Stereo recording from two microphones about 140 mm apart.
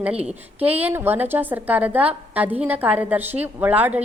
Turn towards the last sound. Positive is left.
turn(degrees=-10)  # may be behind; listen again after turning